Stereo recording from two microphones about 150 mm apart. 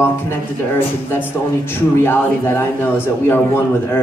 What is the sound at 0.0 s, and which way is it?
A woman's voice, 15° left (ahead or behind).